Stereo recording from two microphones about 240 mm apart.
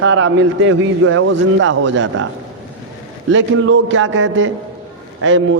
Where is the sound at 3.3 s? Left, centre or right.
Right.